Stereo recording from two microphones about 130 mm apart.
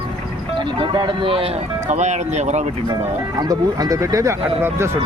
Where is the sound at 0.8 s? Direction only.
40° right (ahead or behind).